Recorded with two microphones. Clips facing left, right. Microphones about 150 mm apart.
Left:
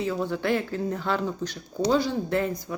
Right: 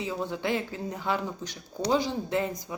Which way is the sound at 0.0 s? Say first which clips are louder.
Left 4 dB; 15° right (ahead or behind).